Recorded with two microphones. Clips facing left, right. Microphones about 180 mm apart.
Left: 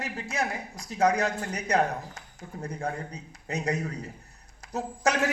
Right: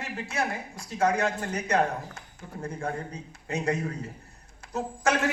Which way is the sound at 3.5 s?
40° left (ahead or behind).